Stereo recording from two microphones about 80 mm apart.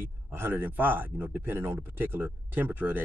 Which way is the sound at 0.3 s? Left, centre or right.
Right.